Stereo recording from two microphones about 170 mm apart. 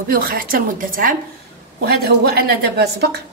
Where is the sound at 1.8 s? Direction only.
65° right (ahead or behind).